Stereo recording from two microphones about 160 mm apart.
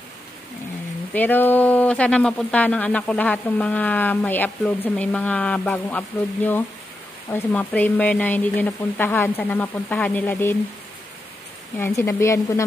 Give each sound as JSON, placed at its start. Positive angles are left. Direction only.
{"t": 1.1, "sound": "speech", "side_deg": 10}
{"t": 11.8, "sound": "speech", "side_deg": 15}